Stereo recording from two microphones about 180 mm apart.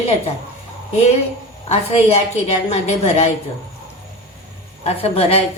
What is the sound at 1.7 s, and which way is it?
A woman's voice, 35° left (ahead or behind).